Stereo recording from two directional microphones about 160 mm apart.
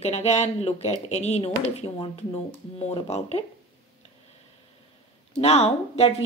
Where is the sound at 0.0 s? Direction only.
45° left (ahead or behind).